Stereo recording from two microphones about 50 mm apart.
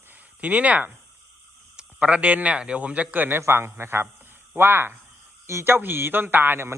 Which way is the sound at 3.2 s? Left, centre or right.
Right.